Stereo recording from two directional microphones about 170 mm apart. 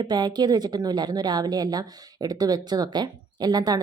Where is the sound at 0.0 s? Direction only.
25° right (ahead or behind).